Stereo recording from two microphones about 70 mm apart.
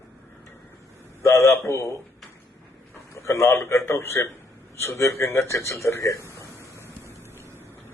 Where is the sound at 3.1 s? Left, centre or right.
Left.